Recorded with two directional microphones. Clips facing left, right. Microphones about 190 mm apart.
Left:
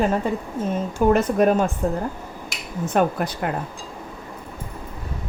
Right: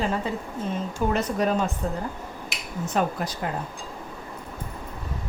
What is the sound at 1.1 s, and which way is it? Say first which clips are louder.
Speech: left 6 dB; 50° left (ahead or behind).